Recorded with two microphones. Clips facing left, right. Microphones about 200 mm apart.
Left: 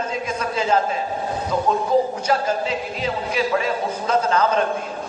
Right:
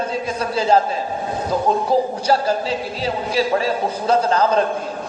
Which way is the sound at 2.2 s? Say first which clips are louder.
Right 3 dB; 35° right (ahead or behind).